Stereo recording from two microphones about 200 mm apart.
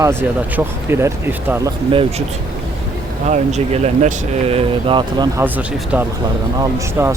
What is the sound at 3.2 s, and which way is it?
Speech, 35° right (ahead or behind).